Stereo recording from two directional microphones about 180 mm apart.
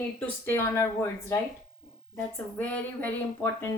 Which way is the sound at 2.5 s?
10° left (ahead or behind).